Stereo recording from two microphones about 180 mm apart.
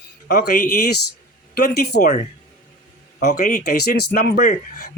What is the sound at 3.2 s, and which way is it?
Speech, 65° left (ahead or behind).